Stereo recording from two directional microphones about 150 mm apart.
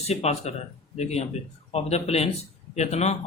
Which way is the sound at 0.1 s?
45° left (ahead or behind).